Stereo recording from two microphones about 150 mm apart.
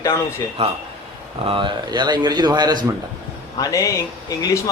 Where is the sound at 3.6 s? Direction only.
25° left (ahead or behind).